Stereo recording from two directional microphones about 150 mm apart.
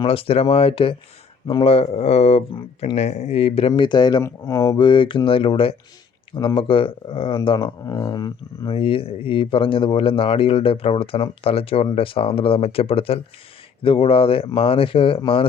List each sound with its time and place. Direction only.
0.0 s speech: 35° left (ahead or behind)
2.5 s speech: 30° left (ahead or behind)
2.9 s speech: 45° left (ahead or behind)
3.7 s speech: 30° left (ahead or behind)
7.9 s speech: 25° left (ahead or behind)